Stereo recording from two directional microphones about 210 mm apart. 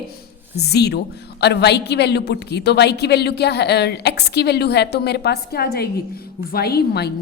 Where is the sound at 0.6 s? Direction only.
50° left (ahead or behind).